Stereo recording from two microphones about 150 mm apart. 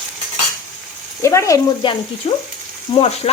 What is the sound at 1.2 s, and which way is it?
Speech, 20° left (ahead or behind).